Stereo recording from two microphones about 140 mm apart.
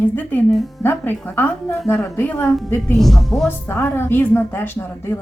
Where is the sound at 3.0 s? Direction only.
Centre (ahead or behind).